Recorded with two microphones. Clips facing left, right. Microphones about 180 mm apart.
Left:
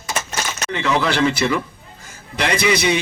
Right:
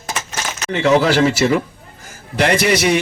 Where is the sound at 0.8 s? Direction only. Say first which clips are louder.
Right 5 dB; 40° right (ahead or behind).